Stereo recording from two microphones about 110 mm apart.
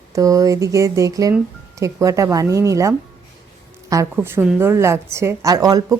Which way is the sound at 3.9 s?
30° right (ahead or behind).